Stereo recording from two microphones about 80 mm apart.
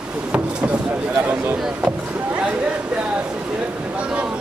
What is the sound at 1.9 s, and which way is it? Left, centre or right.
Rowboat, centre.